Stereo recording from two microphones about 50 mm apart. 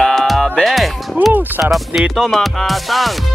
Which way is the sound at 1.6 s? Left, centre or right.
Right.